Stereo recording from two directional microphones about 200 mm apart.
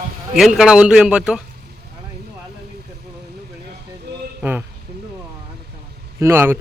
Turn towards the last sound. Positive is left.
turn(degrees=-10)  # may be behind; listen again after turning